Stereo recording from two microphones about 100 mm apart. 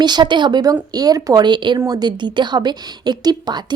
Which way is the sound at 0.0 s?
45° right (ahead or behind).